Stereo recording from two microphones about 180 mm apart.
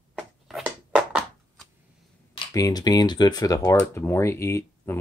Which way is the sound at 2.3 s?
20° left (ahead or behind).